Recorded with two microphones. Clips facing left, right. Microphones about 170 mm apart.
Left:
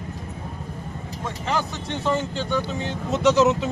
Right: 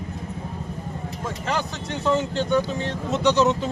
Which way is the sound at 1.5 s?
Centre (ahead or behind).